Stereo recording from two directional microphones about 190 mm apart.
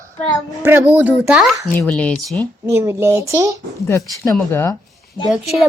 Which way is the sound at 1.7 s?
5° left (ahead or behind).